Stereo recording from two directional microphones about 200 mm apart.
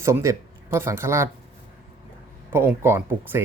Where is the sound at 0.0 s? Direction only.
15° right (ahead or behind).